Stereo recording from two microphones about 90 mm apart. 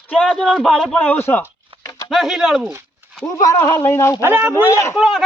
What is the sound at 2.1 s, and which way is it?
Speech, centre (ahead or behind).